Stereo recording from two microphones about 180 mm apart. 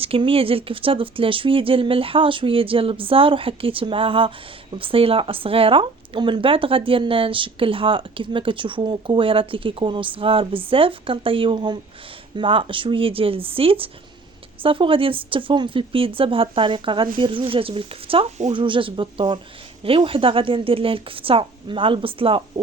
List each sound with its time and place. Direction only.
0.0 s speech: 30° right (ahead or behind)